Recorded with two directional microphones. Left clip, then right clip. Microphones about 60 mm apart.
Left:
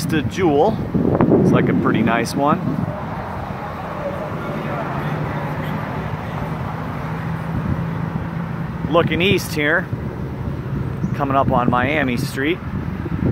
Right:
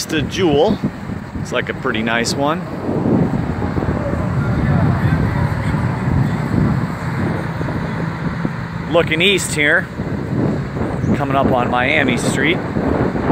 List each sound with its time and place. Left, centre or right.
0.1 s speech: right
8.9 s speech: right
11.1 s speech: centre
12.3 s speech: centre